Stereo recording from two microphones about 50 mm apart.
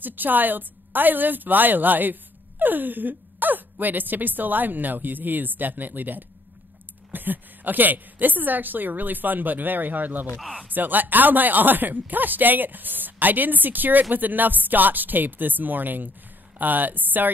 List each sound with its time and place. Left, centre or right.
0.0 s speech: right